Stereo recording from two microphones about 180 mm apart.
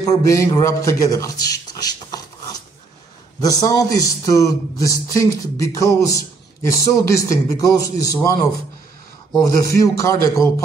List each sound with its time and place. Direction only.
0.0 s a man's voice: 20° left (ahead or behind)